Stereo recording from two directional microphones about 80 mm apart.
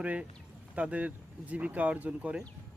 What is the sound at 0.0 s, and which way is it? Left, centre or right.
Speech, centre.